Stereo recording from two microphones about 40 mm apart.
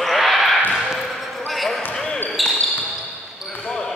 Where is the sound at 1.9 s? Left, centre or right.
Centre.